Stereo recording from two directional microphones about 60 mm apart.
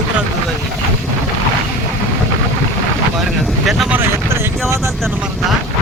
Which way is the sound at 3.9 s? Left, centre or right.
Right.